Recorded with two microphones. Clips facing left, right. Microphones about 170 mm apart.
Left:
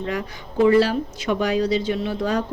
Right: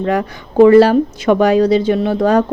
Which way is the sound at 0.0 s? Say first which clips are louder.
Right 10 dB; 60° right (ahead or behind).